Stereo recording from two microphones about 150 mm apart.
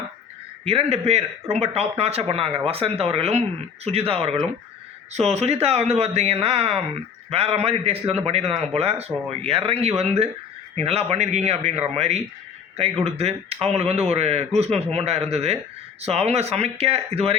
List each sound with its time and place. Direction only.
0.6 s a man's voice: 45° right (ahead or behind)